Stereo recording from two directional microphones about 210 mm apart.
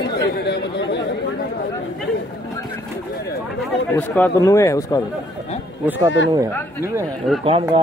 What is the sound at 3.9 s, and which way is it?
Speech, 10° left (ahead or behind).